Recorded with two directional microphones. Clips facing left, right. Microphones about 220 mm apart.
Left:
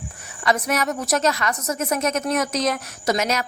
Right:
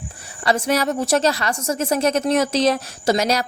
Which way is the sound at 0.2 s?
30° right (ahead or behind).